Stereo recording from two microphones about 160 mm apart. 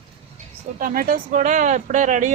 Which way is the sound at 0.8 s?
60° right (ahead or behind).